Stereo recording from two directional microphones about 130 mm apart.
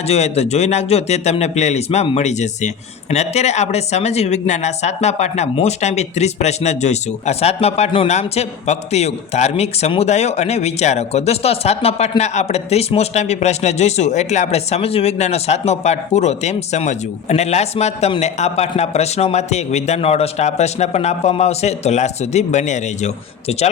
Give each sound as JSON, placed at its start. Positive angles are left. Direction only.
{"t": 0.1, "sound": "speech", "side_deg": 55}